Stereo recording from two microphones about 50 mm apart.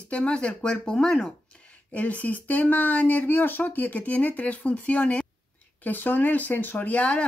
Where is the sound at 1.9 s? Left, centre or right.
Left.